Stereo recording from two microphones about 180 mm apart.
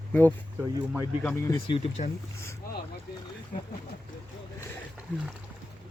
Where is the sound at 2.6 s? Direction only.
55° left (ahead or behind).